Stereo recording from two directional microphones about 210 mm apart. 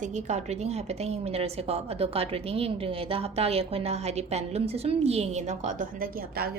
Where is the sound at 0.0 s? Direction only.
35° right (ahead or behind).